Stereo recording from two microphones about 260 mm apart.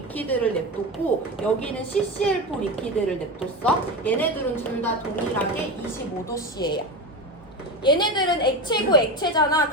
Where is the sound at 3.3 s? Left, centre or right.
Centre.